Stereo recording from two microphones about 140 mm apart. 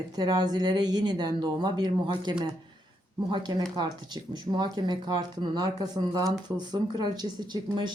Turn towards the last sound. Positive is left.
turn(degrees=-30)  # may be behind; listen again after turning